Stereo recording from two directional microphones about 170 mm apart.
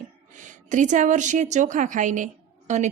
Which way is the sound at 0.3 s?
45° right (ahead or behind).